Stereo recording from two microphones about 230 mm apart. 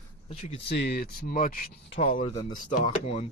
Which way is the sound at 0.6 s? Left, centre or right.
Left.